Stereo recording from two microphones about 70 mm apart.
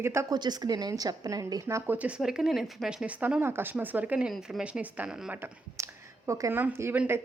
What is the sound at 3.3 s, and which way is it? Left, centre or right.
Speech, right.